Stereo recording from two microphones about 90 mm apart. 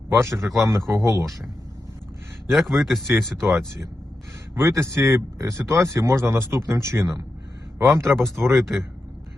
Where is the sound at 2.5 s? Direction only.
Centre (ahead or behind).